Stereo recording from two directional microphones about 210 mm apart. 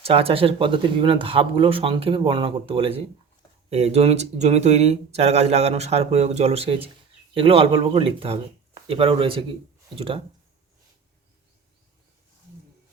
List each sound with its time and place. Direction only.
0.0 s speech: 25° right (ahead or behind)